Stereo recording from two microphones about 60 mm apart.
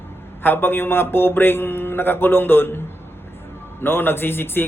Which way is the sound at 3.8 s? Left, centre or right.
Left.